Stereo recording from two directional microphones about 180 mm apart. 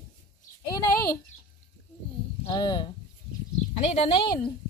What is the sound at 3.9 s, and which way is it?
Speech, 30° left (ahead or behind).